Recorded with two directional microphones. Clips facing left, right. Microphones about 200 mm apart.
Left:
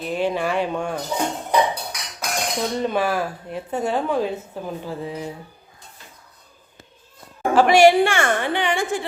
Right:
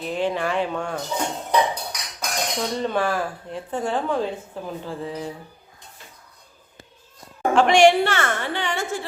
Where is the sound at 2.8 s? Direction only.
10° left (ahead or behind).